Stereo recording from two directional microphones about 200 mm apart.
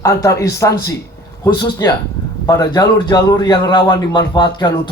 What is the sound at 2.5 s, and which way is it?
A man's voice, 20° left (ahead or behind).